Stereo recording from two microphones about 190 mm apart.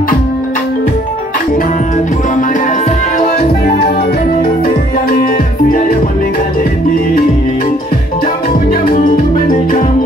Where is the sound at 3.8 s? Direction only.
50° left (ahead or behind).